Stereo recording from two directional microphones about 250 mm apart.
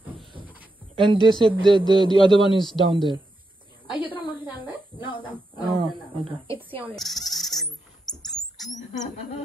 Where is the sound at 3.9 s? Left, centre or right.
Centre.